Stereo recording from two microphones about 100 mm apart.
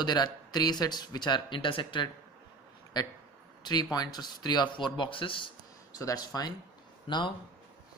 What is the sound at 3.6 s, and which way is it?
Speech, 45° left (ahead or behind).